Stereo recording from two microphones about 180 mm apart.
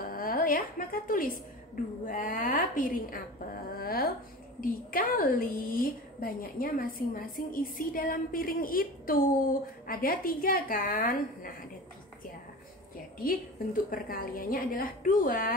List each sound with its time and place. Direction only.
0.0 s a woman's voice: 55° left (ahead or behind)
13.8 s a woman's voice: 50° left (ahead or behind)